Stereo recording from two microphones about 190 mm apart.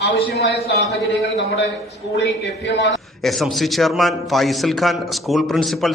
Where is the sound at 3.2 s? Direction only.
Centre (ahead or behind).